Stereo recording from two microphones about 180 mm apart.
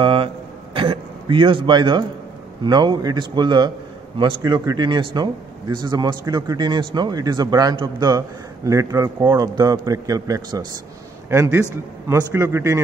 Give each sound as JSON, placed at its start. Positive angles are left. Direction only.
{"t": 0.0, "sound": "a man's voice", "side_deg": -30}
{"t": 0.7, "sound": "a sound", "side_deg": -30}
{"t": 2.6, "sound": "a man's voice", "side_deg": -25}